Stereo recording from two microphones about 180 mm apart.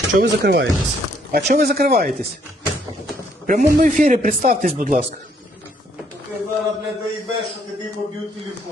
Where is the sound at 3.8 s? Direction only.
45° right (ahead or behind).